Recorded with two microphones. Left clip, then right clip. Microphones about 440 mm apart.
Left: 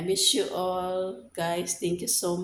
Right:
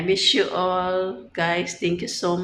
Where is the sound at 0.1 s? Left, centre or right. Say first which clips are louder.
Right 6 dB; left.